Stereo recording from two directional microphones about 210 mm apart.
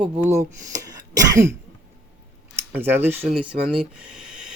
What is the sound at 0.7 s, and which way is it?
Cough, 15° right (ahead or behind).